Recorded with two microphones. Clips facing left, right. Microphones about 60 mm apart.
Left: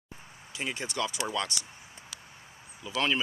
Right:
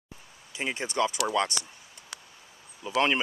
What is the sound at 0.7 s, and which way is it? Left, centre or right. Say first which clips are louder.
Speech: right 7 dB; right.